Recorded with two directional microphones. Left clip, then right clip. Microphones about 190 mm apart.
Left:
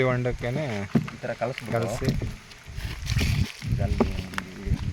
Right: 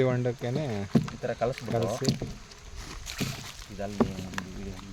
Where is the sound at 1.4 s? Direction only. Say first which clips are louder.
Left 2 dB; centre (ahead or behind).